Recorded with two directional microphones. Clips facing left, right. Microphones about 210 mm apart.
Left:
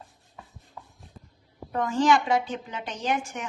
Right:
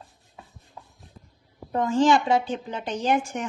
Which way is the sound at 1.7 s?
25° right (ahead or behind).